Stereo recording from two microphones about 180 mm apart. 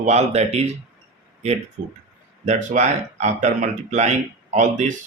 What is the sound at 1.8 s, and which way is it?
Speech, 55° right (ahead or behind).